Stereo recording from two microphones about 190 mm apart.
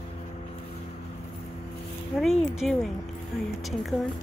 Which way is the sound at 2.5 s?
Centre (ahead or behind).